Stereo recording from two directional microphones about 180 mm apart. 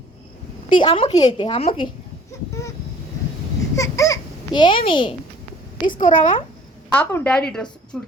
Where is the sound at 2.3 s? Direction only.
15° left (ahead or behind).